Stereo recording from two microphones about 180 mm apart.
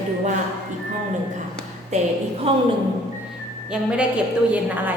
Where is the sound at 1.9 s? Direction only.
40° right (ahead or behind).